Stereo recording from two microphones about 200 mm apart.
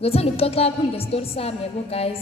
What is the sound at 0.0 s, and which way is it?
A woman's voice, 30° left (ahead or behind).